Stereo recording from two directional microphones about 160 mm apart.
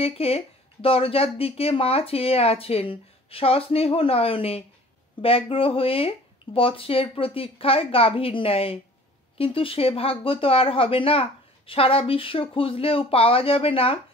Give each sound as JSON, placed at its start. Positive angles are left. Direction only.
{"t": 0.0, "sound": "speech", "side_deg": 35}